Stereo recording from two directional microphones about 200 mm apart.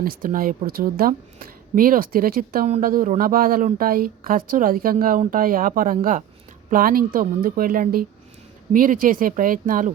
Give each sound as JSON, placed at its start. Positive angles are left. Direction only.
{"t": 0.0, "sound": "a woman's voice", "side_deg": -45}